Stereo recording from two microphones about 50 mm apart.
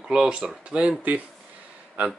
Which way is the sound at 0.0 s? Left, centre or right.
Centre.